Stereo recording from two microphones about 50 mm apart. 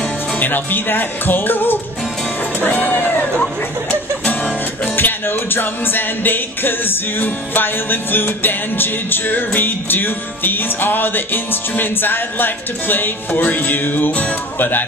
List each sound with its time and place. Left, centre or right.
0.4 s speech: left
2.6 s music: left
4.9 s music: left